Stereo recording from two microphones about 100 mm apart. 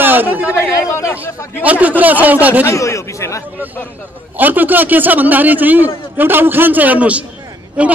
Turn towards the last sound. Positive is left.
turn(degrees=-10)  # may be behind; listen again after turning